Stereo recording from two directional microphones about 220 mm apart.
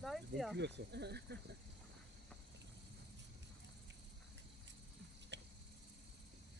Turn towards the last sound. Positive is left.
turn(degrees=-50)  # may be behind; listen again after turning